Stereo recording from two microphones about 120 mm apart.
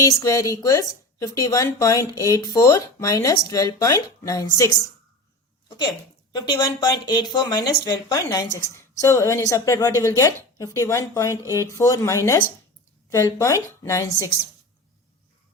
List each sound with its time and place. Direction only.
0.0 s a woman's voice: 30° left (ahead or behind)
5.6 s a sound: 35° left (ahead or behind)
6.3 s a woman's voice: 35° left (ahead or behind)